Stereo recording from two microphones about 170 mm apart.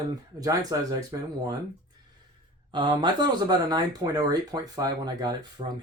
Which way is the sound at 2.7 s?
25° right (ahead or behind).